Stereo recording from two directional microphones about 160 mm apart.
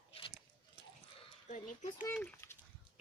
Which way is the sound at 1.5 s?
55° left (ahead or behind).